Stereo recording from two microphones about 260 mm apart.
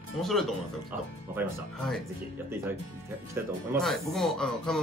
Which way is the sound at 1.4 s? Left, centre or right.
Centre.